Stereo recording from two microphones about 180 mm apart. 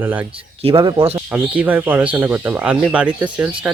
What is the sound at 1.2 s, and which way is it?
Speech, 10° right (ahead or behind).